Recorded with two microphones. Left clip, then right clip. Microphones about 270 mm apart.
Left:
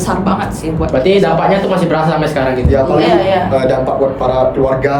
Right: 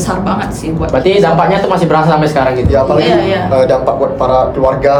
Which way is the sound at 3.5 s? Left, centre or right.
Centre.